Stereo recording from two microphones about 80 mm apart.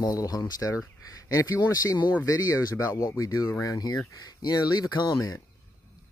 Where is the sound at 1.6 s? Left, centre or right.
Left.